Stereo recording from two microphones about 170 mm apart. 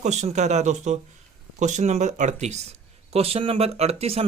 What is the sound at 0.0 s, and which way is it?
Speech, 40° right (ahead or behind).